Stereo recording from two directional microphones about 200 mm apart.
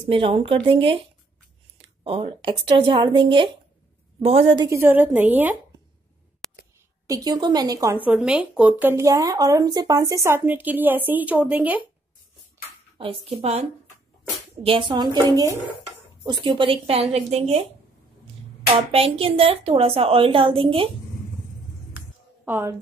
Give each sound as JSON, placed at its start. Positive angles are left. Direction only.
{"t": 0.0, "sound": "speech", "side_deg": -25}
{"t": 2.0, "sound": "speech", "side_deg": -25}
{"t": 4.6, "sound": "speech", "side_deg": -10}
{"t": 6.4, "sound": "a sound", "side_deg": 5}
{"t": 7.1, "sound": "speech", "side_deg": -20}
{"t": 13.3, "sound": "speech", "side_deg": -30}
{"t": 22.4, "sound": "a woman's voice", "side_deg": -10}